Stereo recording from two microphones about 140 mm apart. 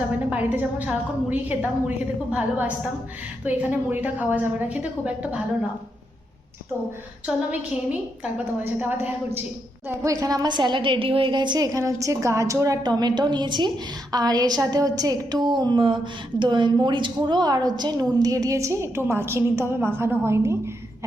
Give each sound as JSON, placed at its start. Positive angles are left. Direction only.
{"t": 0.3, "sound": "a woman's voice", "side_deg": -10}
{"t": 7.3, "sound": "a woman's voice", "side_deg": -5}